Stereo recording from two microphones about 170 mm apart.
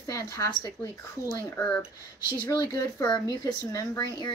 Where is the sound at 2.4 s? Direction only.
15° left (ahead or behind).